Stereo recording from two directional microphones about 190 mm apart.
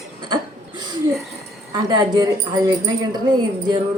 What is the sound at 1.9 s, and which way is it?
A man's voice, 20° right (ahead or behind).